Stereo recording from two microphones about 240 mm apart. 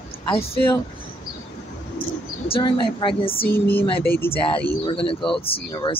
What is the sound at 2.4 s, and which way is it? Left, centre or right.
Speech, left.